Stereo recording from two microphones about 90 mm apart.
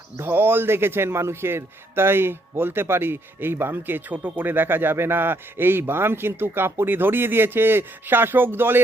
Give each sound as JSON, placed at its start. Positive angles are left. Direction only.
{"t": 0.2, "sound": "a man's voice", "side_deg": -25}